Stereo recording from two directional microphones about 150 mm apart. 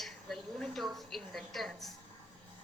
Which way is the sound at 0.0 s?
Centre (ahead or behind).